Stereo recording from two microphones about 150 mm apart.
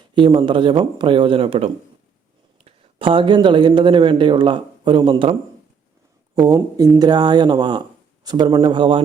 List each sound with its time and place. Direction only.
0.1 s speech: 35° right (ahead or behind)